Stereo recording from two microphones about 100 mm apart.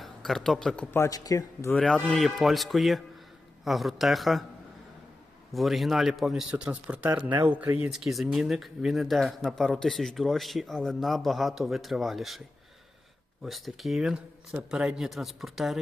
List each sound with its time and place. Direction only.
0.0 s a man's voice: centre (ahead or behind)
0.9 s speech: 30° left (ahead or behind)
1.7 s speech: 5° left (ahead or behind)
5.5 s speech: centre (ahead or behind); by 7.9 s 15° right (ahead or behind)
7.9 s speech: 5° right (ahead or behind)
13.4 s speech: centre (ahead or behind)